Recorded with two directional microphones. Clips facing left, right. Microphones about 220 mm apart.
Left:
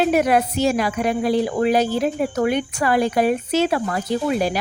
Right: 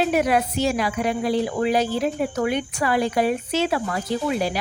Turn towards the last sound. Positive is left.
turn(degrees=45)  # may be behind; listen again after turning